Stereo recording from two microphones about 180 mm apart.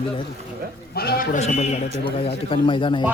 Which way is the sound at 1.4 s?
35° left (ahead or behind).